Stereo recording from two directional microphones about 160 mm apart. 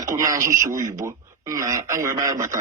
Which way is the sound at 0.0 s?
20° right (ahead or behind).